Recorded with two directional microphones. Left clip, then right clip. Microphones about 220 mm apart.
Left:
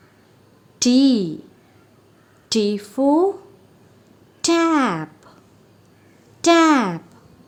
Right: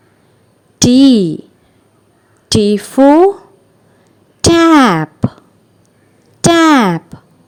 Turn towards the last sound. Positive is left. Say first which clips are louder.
# right 8 dB
turn(degrees=-40)  # may be behind; listen again after turning